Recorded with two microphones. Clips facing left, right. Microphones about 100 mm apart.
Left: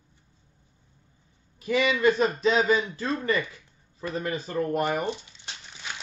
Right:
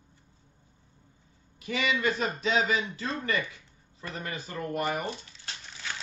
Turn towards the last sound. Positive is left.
turn(degrees=20)  # may be behind; listen again after turning